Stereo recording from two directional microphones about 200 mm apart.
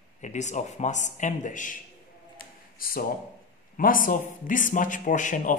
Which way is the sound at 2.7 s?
45° left (ahead or behind).